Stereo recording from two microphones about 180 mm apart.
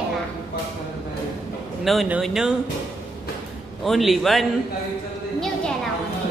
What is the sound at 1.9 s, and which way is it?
Speech, 5° right (ahead or behind).